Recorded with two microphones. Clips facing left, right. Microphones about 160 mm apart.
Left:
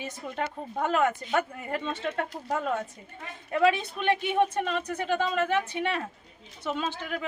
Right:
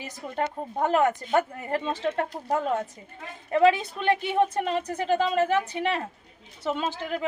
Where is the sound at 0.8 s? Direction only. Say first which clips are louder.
Right 3 dB; 35° right (ahead or behind).